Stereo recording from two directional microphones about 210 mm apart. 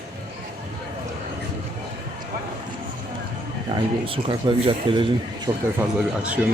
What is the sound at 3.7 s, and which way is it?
Speech, 25° right (ahead or behind).